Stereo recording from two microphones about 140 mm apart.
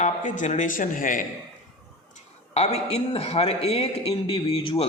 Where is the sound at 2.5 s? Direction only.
50° left (ahead or behind).